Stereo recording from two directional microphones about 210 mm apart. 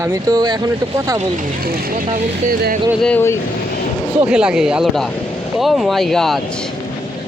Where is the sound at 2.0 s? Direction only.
35° right (ahead or behind).